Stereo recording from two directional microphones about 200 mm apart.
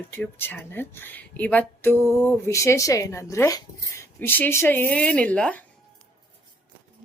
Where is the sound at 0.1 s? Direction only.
10° left (ahead or behind).